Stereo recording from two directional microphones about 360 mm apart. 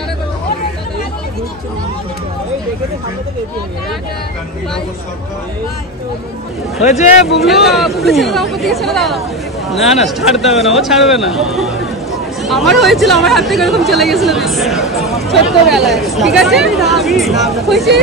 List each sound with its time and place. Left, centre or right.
6.8 s speech: centre
7.2 s speech: centre